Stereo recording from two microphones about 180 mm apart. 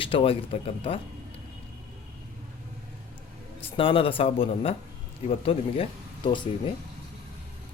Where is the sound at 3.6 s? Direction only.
30° left (ahead or behind).